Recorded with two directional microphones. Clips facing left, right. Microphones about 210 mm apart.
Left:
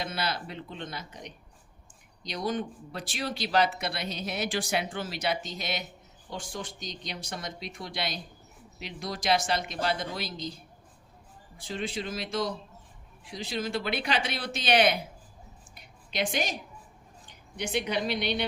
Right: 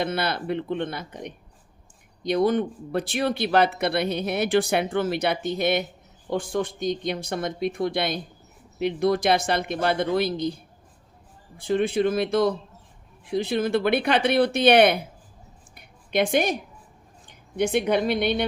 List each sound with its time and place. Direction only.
0.0 s speech: 60° right (ahead or behind)
15.7 s a sound: 55° right (ahead or behind)
17.6 s speech: 55° right (ahead or behind)